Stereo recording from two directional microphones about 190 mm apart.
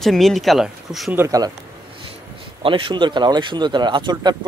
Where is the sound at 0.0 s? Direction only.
Centre (ahead or behind).